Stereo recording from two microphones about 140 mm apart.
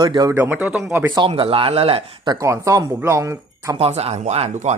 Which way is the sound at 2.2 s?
20° right (ahead or behind).